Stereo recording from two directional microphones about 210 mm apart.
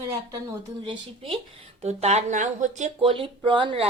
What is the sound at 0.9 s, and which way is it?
Speech, 25° right (ahead or behind).